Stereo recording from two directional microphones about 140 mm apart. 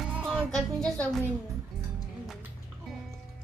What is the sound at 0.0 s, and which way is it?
Music, 5° right (ahead or behind).